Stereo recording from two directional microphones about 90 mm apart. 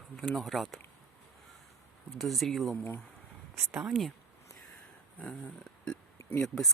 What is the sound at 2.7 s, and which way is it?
Speech, 20° left (ahead or behind).